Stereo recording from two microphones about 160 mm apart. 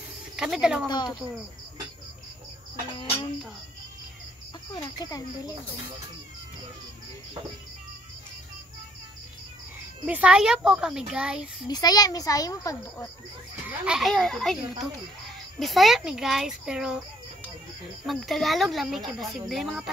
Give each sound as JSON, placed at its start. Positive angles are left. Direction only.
{"t": 0.4, "sound": "speech", "side_deg": -5}
{"t": 0.8, "sound": "a child's voice", "side_deg": 25}
{"t": 4.7, "sound": "a child's voice", "side_deg": 20}
{"t": 10.0, "sound": "speech", "side_deg": -10}
{"t": 11.7, "sound": "a child's voice", "side_deg": 25}
{"t": 13.7, "sound": "speech", "side_deg": -5}
{"t": 18.0, "sound": "speech", "side_deg": 0}